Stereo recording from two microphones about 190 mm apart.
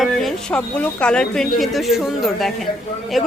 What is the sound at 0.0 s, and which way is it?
A woman's voice, centre (ahead or behind).